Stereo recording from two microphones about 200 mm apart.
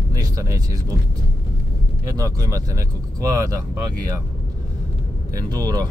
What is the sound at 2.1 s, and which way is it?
Speech, 15° right (ahead or behind).